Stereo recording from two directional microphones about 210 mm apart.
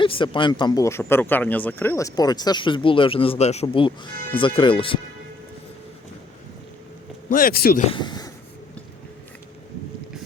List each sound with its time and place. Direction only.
0.0 s speech: 25° left (ahead or behind)
7.3 s a man's voice: 40° left (ahead or behind)
7.9 s speech: 20° left (ahead or behind)